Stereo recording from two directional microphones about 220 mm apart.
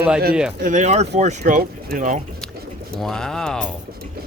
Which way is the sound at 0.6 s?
35° right (ahead or behind).